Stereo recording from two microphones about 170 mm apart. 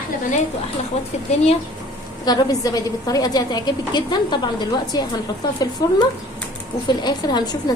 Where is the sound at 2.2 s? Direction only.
25° left (ahead or behind).